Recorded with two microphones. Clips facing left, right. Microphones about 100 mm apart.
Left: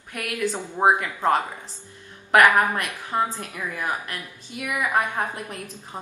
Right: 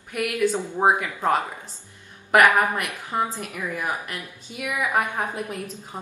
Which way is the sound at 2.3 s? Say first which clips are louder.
Even; 15° right (ahead or behind).